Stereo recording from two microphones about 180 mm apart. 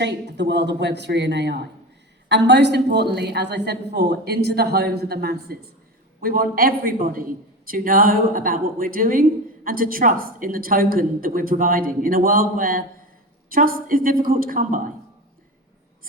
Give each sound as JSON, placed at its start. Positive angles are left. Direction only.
{"t": 0.0, "sound": "a woman's voice", "side_deg": -75}